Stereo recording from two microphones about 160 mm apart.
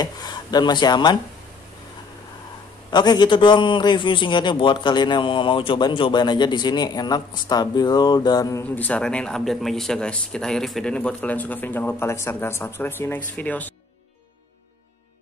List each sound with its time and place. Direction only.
0.0 s speech: 25° left (ahead or behind)
2.9 s a man's voice: 25° left (ahead or behind)
8.6 s speech: 10° left (ahead or behind)